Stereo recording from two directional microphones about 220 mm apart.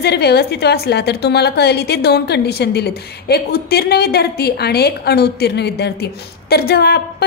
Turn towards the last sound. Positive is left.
turn(degrees=45)  # may be behind; listen again after turning